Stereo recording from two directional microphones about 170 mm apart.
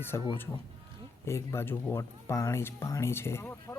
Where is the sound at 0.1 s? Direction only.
20° left (ahead or behind).